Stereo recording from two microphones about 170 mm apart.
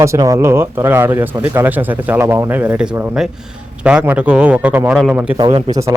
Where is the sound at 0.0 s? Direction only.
20° right (ahead or behind).